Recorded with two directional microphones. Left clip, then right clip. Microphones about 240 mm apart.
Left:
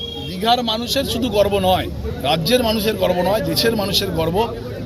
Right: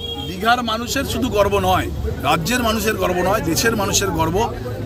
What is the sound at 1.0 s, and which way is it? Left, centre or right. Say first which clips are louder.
Speech: left 1 dB; right.